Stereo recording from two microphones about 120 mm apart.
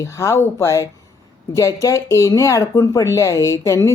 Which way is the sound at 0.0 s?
25° left (ahead or behind).